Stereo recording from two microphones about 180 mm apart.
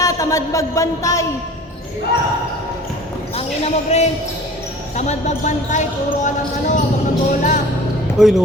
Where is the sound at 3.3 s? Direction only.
35° left (ahead or behind).